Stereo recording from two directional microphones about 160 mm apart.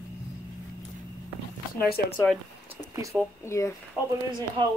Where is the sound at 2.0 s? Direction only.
80° left.